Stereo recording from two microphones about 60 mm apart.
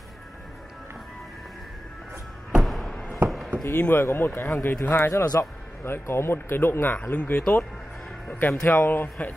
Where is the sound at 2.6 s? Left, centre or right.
Centre.